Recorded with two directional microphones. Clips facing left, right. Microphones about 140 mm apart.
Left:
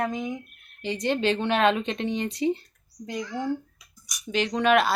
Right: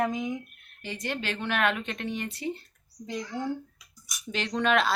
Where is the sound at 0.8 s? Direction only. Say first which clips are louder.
Left 9 dB; 20° left (ahead or behind).